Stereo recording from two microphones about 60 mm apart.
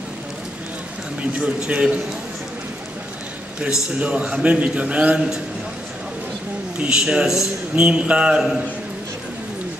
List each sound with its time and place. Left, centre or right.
1.4 s a man's voice: centre
4.0 s a man's voice: centre
6.8 s a man's voice: centre